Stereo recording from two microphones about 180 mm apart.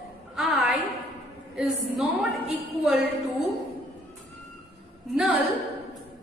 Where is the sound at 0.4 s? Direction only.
Centre (ahead or behind).